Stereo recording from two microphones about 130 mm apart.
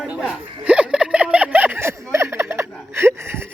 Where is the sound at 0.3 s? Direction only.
10° right (ahead or behind).